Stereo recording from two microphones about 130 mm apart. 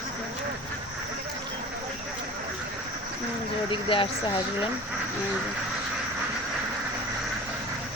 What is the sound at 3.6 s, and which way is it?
Speech, 40° left (ahead or behind).